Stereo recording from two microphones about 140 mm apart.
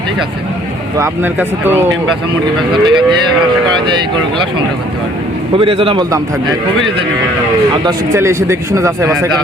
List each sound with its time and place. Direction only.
0.9 s speech: 15° right (ahead or behind)
2.8 s a man's voice: 35° right (ahead or behind)
5.5 s a man's voice: 40° right (ahead or behind)
6.0 s a man's voice: 25° right (ahead or behind)
7.7 s a man's voice: 25° right (ahead or behind)